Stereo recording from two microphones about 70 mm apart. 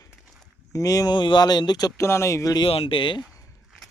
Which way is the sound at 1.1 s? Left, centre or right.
Left.